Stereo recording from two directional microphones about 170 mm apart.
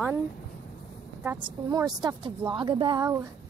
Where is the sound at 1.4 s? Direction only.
20° right (ahead or behind).